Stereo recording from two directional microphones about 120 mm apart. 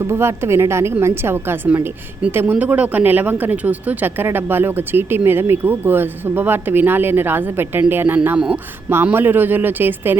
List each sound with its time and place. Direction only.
0.0 s a woman's voice: 20° right (ahead or behind)